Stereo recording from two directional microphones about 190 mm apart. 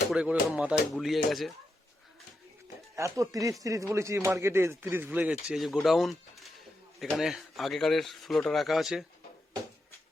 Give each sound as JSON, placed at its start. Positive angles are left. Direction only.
{"t": 0.1, "sound": "speech", "side_deg": -5}
{"t": 2.9, "sound": "speech", "side_deg": -15}